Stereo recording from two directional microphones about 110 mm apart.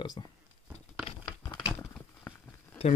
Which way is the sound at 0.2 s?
45° left (ahead or behind).